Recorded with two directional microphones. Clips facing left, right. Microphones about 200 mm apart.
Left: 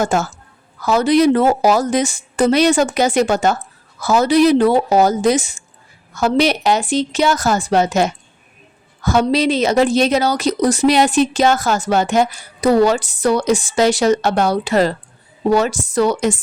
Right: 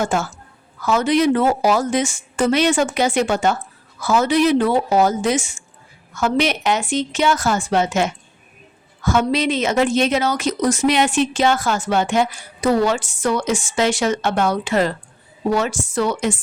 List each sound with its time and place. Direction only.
0.0 s speech: 40° left (ahead or behind)
9.0 s a sound: 35° left (ahead or behind)
9.3 s speech: 35° left (ahead or behind)